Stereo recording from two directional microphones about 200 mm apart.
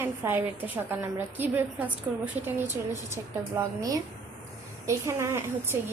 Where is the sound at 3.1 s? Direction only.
15° right (ahead or behind).